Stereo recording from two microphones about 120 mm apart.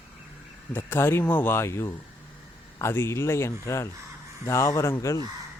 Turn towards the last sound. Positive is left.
turn(degrees=25)  # may be behind; listen again after turning